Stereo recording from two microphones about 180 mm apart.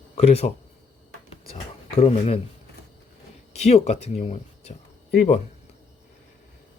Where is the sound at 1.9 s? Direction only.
35° left (ahead or behind).